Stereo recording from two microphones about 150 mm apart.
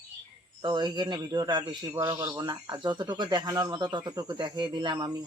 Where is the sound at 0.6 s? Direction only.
30° right (ahead or behind).